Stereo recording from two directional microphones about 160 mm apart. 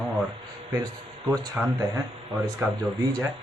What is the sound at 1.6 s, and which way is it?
Speech, 10° right (ahead or behind).